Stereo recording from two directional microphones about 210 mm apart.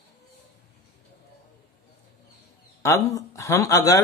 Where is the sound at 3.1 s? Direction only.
15° left (ahead or behind).